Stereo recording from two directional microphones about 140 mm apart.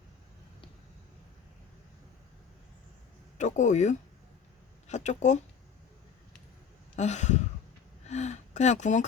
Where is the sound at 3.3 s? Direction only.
60° left (ahead or behind).